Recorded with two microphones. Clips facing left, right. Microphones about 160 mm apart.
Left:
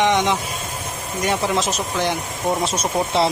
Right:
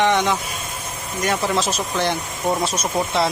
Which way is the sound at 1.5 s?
15° left (ahead or behind).